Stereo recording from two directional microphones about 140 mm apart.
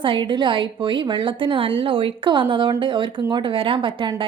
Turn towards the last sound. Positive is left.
turn(degrees=-40)  # may be behind; listen again after turning